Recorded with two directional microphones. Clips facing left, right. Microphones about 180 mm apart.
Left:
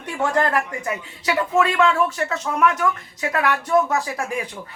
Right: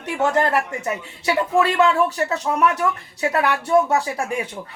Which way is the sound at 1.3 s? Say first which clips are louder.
Right 1 dB; 30° right (ahead or behind).